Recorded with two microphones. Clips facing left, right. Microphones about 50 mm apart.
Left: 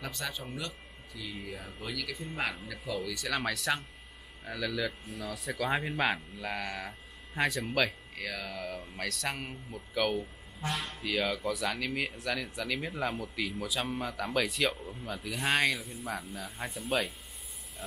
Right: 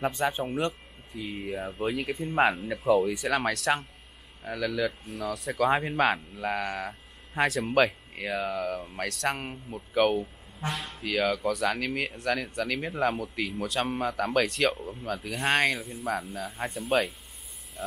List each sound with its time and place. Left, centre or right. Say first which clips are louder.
0.0 s speech: right 11 dB; right
4.5 s speech: right 5 dB; centre
5.0 s speech: right 5 dB; centre
7.6 s speech: right 7 dB; centre
8.5 s speech: right 7 dB; centre
9.4 s speech: right 4 dB; centre
10.7 s speech: even; centre
11.0 s speech: right 6 dB; centre
11.3 s speech: right 5 dB; centre